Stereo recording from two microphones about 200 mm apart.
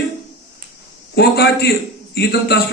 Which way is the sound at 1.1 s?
55° left (ahead or behind).